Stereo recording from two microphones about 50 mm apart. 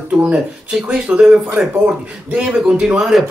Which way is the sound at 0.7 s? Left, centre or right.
Centre.